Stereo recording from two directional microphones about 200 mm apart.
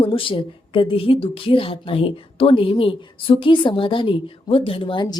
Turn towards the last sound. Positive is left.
turn(degrees=25)  # may be behind; listen again after turning